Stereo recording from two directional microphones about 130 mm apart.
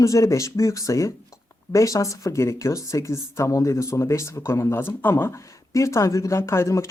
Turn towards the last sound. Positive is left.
turn(degrees=20)  # may be behind; listen again after turning